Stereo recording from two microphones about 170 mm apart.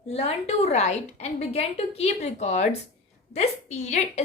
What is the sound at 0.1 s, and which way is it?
A woman's voice, 35° left (ahead or behind).